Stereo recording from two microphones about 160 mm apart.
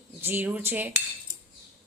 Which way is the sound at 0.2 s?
15° right (ahead or behind).